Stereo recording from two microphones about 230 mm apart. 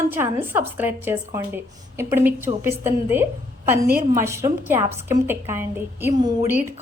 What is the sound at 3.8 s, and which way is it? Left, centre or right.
Speech, right.